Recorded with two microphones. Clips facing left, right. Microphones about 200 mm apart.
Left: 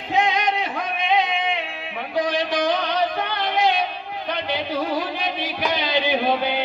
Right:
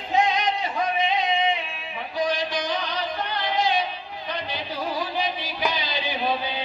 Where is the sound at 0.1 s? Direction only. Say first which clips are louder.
Left 1 dB; 60° left (ahead or behind).